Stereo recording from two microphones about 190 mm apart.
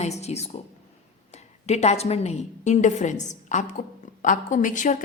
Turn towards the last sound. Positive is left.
turn(degrees=40)  # may be behind; listen again after turning